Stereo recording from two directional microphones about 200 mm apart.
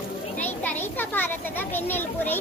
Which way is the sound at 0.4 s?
10° left (ahead or behind).